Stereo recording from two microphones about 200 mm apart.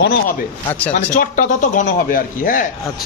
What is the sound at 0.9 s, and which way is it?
A man's voice, 40° left (ahead or behind).